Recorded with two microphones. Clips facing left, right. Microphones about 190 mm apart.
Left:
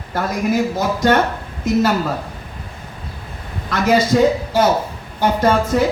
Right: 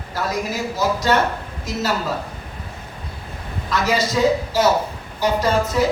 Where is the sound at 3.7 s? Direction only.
55° left (ahead or behind).